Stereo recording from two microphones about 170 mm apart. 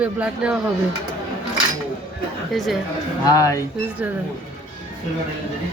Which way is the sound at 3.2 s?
20° left (ahead or behind).